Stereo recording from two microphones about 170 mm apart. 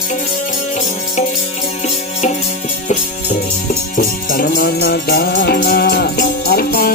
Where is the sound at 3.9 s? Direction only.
55° left (ahead or behind).